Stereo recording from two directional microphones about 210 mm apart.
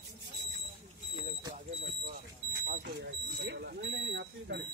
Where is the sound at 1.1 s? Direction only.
20° right (ahead or behind).